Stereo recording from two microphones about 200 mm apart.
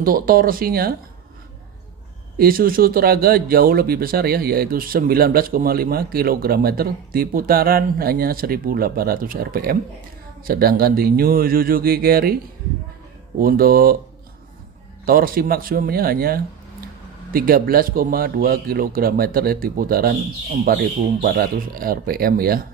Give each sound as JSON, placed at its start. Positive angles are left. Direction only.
{"t": 0.0, "sound": "speech", "side_deg": -45}
{"t": 2.3, "sound": "speech", "side_deg": -45}
{"t": 13.4, "sound": "speech", "side_deg": -45}
{"t": 15.0, "sound": "speech", "side_deg": -45}